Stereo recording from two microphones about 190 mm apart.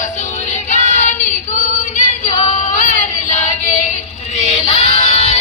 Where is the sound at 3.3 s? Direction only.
40° left (ahead or behind).